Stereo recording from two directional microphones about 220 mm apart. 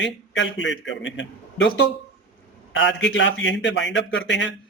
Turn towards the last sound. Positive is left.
turn(degrees=55)  # may be behind; listen again after turning